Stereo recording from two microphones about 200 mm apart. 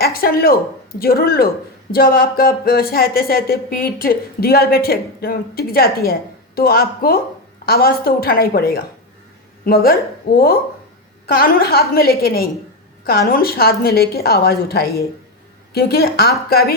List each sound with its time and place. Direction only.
0.0 s speech: 50° left (ahead or behind)